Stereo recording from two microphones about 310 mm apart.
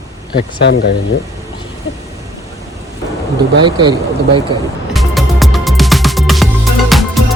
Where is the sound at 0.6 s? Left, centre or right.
Left.